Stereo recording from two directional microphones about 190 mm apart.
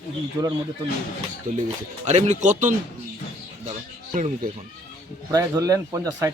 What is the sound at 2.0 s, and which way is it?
Speech, 35° right (ahead or behind).